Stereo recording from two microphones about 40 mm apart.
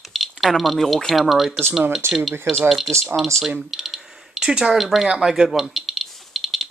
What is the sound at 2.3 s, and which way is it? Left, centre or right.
Speech, right.